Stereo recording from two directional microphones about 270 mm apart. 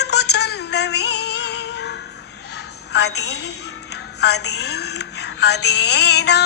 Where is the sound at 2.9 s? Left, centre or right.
Left.